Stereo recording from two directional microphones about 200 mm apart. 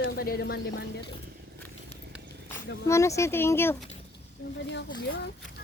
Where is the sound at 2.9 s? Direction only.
15° left (ahead or behind).